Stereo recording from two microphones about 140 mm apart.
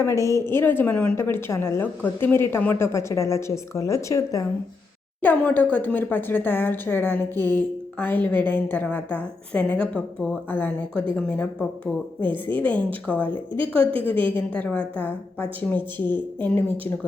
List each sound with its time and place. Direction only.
0.0 s a woman's voice: 20° left (ahead or behind)
5.2 s a woman's voice: 10° left (ahead or behind)